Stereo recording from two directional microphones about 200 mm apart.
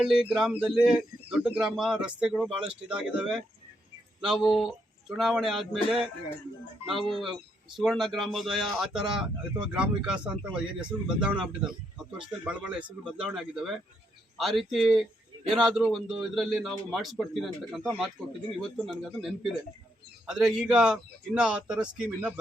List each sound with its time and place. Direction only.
0.0 s speech: centre (ahead or behind)
19.2 s speech: centre (ahead or behind)